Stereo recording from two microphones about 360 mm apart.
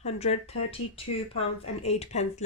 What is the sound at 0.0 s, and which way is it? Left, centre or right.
Speech, centre.